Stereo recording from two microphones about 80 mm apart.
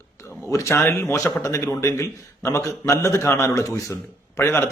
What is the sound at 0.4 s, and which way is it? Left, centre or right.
A man's voice, left.